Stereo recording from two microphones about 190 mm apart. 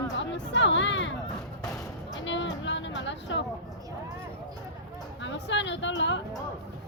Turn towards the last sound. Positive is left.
turn(degrees=75)  # may be behind; listen again after turning